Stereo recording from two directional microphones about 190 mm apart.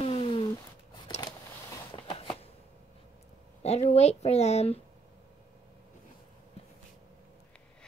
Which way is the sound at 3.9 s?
35° left (ahead or behind).